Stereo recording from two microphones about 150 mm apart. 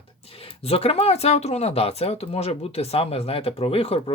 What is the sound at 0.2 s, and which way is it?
Speech, 40° left (ahead or behind).